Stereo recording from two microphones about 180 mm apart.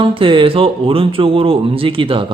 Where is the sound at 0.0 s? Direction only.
30° right (ahead or behind).